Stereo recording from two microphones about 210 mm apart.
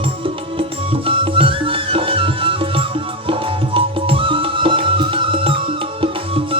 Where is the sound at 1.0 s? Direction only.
25° right (ahead or behind).